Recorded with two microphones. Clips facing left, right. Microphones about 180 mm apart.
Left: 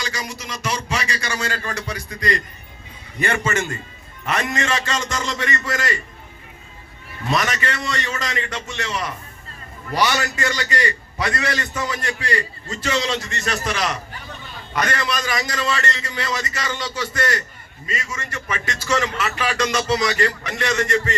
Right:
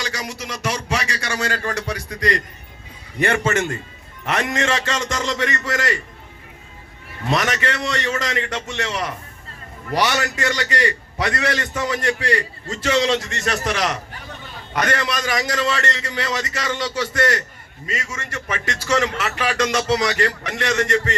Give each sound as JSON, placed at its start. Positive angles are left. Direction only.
{"t": 0.0, "sound": "a man's voice", "side_deg": -75}
{"t": 7.3, "sound": "a man's voice", "side_deg": -75}